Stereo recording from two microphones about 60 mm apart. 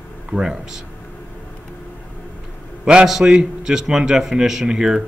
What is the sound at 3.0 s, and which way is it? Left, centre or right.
Speech, centre.